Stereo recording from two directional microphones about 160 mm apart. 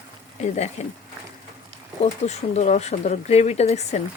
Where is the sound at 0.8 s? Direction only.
45° left (ahead or behind).